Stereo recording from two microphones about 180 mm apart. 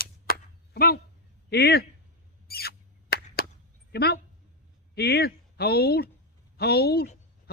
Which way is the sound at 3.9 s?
60° left (ahead or behind).